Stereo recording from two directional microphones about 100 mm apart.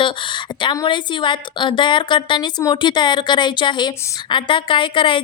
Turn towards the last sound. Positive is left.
turn(degrees=55)  # may be behind; listen again after turning